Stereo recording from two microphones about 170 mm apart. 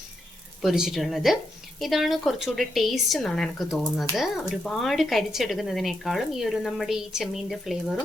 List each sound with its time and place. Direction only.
0.6 s speech: centre (ahead or behind)